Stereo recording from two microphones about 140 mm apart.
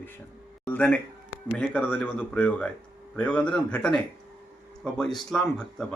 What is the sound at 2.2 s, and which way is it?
A man's voice, 10° left (ahead or behind).